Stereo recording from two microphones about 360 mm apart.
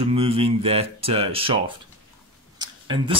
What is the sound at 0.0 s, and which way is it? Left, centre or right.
Speech, centre.